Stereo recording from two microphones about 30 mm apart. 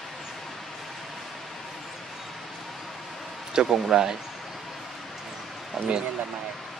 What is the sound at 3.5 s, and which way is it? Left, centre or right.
Speech, centre.